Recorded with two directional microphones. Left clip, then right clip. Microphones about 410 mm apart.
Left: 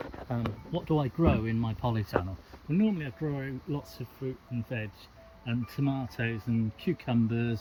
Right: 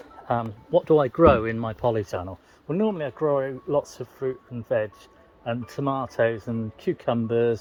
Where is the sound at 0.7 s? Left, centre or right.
Right.